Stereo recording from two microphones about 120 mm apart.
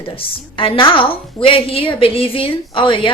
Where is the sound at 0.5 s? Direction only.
45° left (ahead or behind).